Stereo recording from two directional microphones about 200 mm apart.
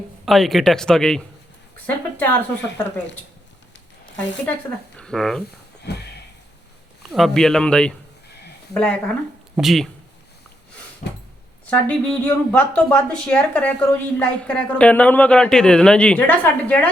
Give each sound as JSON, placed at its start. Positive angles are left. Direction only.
{"t": 0.3, "sound": "speech", "side_deg": 0}
{"t": 4.9, "sound": "speech", "side_deg": 5}
{"t": 5.9, "sound": "sniff", "side_deg": 55}
{"t": 7.1, "sound": "speech", "side_deg": 0}
{"t": 11.6, "sound": "speech", "side_deg": 5}